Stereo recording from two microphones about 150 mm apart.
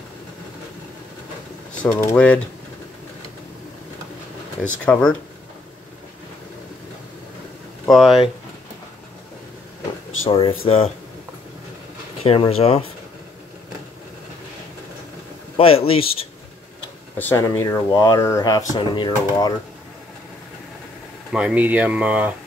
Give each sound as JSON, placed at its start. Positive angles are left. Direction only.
{"t": 1.8, "sound": "speech", "side_deg": 10}
{"t": 4.6, "sound": "speech", "side_deg": 5}
{"t": 7.9, "sound": "speech", "side_deg": 0}
{"t": 10.2, "sound": "speech", "side_deg": 35}
{"t": 12.2, "sound": "speech", "side_deg": 40}
{"t": 15.5, "sound": "speech", "side_deg": 40}
{"t": 17.2, "sound": "speech", "side_deg": 15}
{"t": 21.3, "sound": "speech", "side_deg": -5}